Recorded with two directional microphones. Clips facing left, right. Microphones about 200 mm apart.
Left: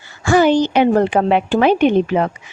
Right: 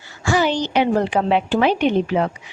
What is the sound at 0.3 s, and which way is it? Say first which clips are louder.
A woman's voice: left 6 dB; 50° left (ahead or behind).